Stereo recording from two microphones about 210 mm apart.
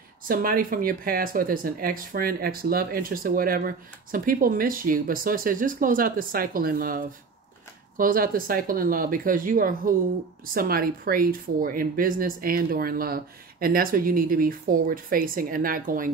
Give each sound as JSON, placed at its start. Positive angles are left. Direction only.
{"t": 0.3, "sound": "speech", "side_deg": -40}
{"t": 8.0, "sound": "speech", "side_deg": -40}